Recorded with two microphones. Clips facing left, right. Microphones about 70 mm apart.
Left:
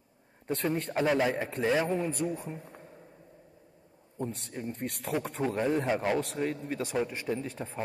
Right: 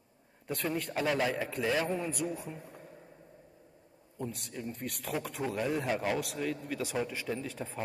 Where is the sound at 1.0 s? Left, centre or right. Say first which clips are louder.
Left 4 dB; centre.